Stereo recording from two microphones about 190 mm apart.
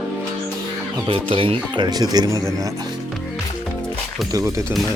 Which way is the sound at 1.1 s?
30° right (ahead or behind).